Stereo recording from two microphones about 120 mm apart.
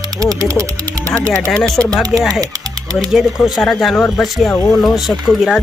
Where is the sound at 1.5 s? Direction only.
5° left (ahead or behind).